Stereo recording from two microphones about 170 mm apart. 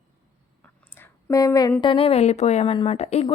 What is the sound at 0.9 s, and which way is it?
A woman's voice, 15° left (ahead or behind).